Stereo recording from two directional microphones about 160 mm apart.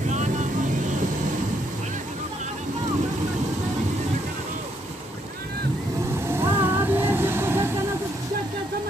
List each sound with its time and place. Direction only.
0.1 s vehicle: 45° right (ahead or behind)
6.3 s vehicle: 15° right (ahead or behind)